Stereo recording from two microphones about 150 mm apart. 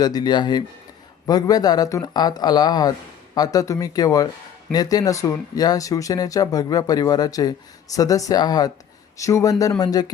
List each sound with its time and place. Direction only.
0.0 s speech: 25° left (ahead or behind)